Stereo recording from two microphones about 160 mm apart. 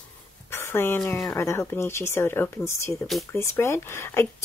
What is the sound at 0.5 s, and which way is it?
Speech, 15° left (ahead or behind).